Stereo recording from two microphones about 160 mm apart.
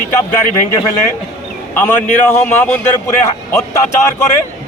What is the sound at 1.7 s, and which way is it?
A man's voice, 10° left (ahead or behind).